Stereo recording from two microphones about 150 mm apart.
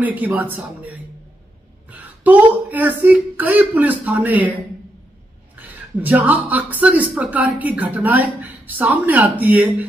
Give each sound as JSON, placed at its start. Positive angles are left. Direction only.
{"t": 0.0, "sound": "speech", "side_deg": -10}
{"t": 5.6, "sound": "speech", "side_deg": -10}